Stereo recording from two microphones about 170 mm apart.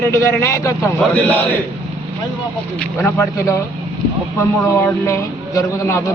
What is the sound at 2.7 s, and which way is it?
Speech, 15° left (ahead or behind).